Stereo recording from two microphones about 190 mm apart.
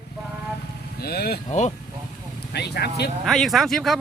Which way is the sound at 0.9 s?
55° left (ahead or behind).